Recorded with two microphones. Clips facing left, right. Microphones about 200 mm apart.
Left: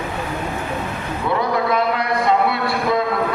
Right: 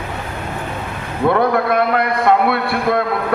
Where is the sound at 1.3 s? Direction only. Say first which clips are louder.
Right 4 dB; 55° right (ahead or behind).